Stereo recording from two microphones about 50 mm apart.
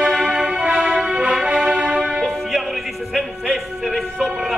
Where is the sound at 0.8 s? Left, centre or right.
Right.